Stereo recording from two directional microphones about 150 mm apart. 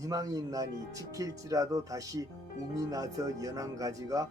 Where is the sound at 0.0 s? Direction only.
20° right (ahead or behind).